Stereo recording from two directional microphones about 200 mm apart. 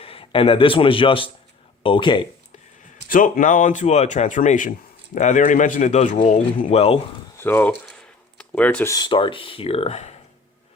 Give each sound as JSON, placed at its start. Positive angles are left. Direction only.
{"t": 0.0, "sound": "speech", "side_deg": 25}
{"t": 3.1, "sound": "a man's voice", "side_deg": 45}
{"t": 7.3, "sound": "speech", "side_deg": 10}